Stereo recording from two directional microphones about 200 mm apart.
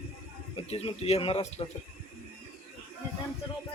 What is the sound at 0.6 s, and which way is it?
Speech, 30° left (ahead or behind).